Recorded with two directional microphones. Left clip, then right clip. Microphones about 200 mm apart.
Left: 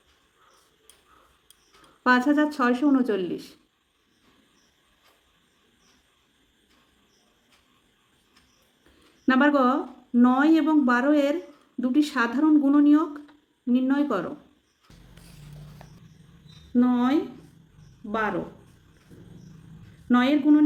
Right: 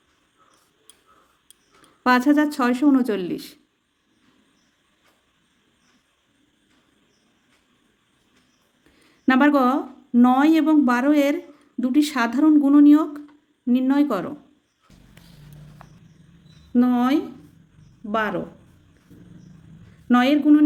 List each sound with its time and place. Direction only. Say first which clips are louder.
2.0 s speech: right 3 dB; 40° right (ahead or behind)
9.2 s speech: right 3 dB; 40° right (ahead or behind)
16.7 s a woman's voice: right 3 dB; 45° right (ahead or behind)
20.1 s a woman's voice: right 4 dB; 45° right (ahead or behind)